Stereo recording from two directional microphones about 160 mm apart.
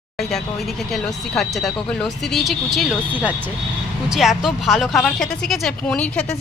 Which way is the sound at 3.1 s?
10° right (ahead or behind).